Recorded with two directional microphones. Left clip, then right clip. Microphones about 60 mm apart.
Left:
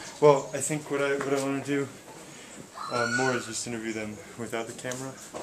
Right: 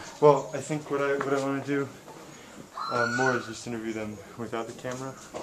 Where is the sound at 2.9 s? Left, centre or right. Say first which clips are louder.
Right 1 dB; left.